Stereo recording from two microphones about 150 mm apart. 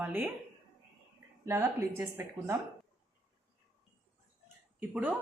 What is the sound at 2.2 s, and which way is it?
Speech, 15° right (ahead or behind).